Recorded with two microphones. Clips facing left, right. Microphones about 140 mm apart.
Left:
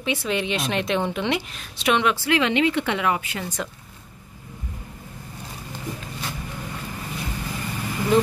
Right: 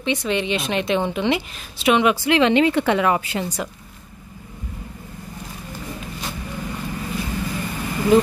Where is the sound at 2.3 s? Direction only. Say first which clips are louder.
Right 5 dB; 30° right (ahead or behind).